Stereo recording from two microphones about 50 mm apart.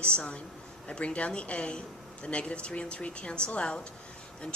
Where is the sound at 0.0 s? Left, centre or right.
Left.